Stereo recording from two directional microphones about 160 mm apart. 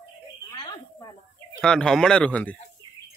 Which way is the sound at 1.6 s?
5° left (ahead or behind).